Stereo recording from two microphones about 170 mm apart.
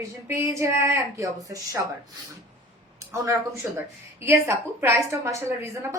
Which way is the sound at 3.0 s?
20° right (ahead or behind).